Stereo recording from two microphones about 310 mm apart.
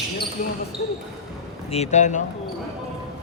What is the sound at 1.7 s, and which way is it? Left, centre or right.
Speech, left.